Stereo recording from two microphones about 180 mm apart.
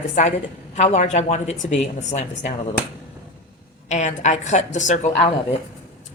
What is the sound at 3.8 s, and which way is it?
A woman's voice, 40° left (ahead or behind).